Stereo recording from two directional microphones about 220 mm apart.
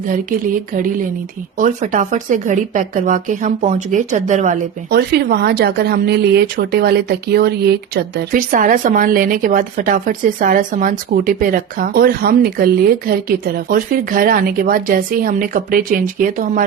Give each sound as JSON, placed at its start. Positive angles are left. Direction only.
{"t": 0.1, "sound": "speech", "side_deg": -35}
{"t": 4.9, "sound": "speech", "side_deg": -45}